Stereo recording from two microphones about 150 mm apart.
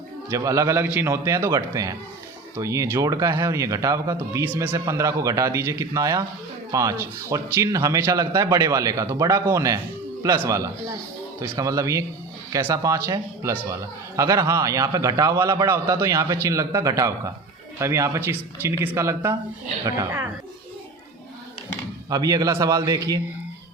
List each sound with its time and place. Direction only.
0.3 s a man's voice: 20° right (ahead or behind)
22.1 s speech: 25° right (ahead or behind)